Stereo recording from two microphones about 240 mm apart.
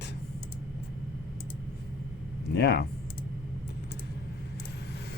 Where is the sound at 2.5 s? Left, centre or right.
Left.